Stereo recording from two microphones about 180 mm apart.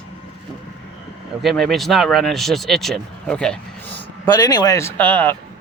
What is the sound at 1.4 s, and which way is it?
Speech, centre (ahead or behind).